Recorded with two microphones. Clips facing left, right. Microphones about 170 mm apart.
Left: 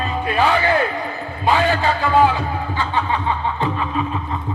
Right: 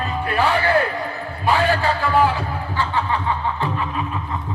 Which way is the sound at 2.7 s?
20° left (ahead or behind).